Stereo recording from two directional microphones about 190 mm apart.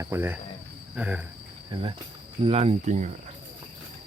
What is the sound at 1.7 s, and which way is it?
Speech, 30° right (ahead or behind).